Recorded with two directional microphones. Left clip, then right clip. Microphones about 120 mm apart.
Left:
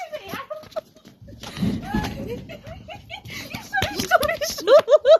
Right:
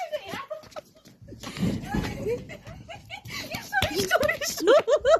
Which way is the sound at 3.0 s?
15° right (ahead or behind).